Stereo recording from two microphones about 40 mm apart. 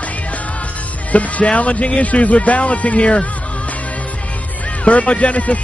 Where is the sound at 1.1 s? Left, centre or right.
Left.